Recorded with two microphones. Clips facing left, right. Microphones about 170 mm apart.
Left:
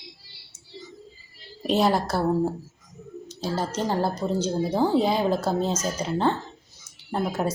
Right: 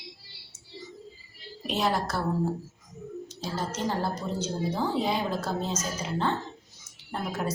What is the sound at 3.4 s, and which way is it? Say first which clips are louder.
A woman's voice: left 5 dB; 30° left (ahead or behind).